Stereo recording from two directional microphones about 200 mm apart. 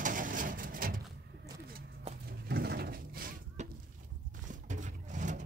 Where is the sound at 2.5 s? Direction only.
50° right (ahead or behind).